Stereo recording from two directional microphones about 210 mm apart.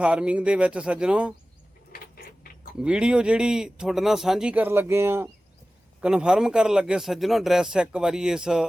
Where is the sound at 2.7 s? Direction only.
5° right (ahead or behind).